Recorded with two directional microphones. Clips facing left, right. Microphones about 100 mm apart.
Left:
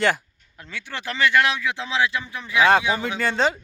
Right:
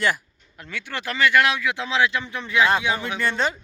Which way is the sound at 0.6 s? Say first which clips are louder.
Right 2 dB; 20° left (ahead or behind).